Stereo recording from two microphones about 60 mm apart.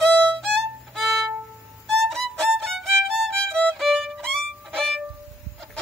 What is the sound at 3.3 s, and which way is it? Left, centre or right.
Violin, centre.